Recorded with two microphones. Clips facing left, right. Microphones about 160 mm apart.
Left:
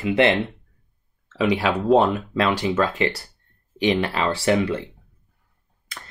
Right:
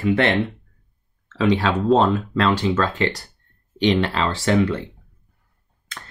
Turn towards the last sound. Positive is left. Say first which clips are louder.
# right 1 dB
turn(degrees=10)  # may be behind; listen again after turning